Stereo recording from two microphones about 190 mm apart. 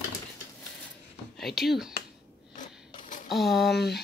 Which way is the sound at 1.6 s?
Centre (ahead or behind).